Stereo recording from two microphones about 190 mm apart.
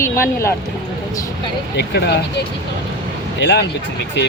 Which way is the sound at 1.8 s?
60° left (ahead or behind).